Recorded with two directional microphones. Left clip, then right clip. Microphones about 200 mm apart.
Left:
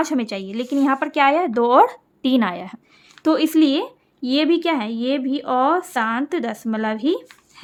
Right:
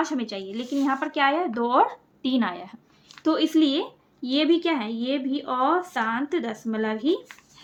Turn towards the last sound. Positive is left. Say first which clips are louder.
# left 3 dB
turn(degrees=55)  # may be behind; listen again after turning